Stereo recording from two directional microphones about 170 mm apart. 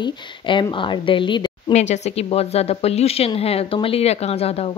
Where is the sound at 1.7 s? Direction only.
40° left (ahead or behind).